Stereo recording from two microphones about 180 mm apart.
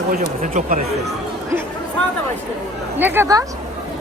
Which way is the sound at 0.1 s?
45° right (ahead or behind).